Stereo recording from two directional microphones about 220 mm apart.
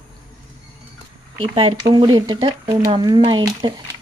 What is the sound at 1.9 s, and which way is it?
Speech, 20° right (ahead or behind).